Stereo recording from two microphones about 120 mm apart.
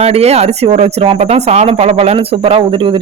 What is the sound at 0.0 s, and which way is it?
Speech, 60° right (ahead or behind).